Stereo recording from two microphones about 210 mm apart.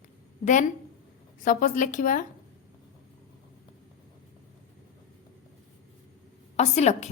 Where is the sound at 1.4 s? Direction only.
40° left (ahead or behind).